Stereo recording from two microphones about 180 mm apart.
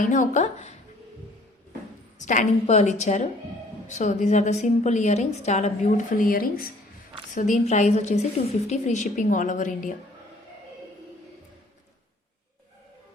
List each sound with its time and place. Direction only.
0.0 s a woman's voice: 45° left (ahead or behind)
2.1 s a woman's voice: 45° left (ahead or behind)